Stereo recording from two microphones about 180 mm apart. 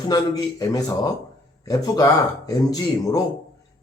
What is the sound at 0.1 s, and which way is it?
Speech, 20° left (ahead or behind).